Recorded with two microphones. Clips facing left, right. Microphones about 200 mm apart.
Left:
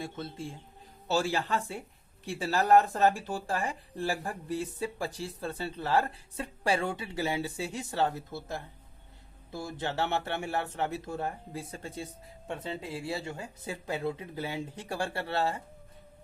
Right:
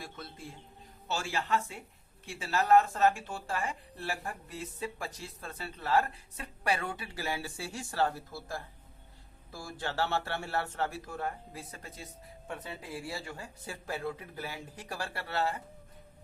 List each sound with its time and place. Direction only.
0.0 s speech: 25° left (ahead or behind)